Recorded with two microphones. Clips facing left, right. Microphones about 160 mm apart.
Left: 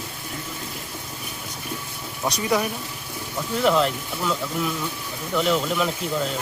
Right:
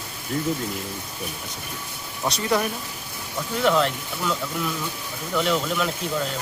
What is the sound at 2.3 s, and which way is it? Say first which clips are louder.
Speech: even; 10° left (ahead or behind).